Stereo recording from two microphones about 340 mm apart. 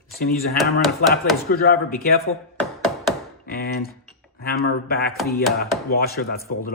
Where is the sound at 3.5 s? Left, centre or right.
Left.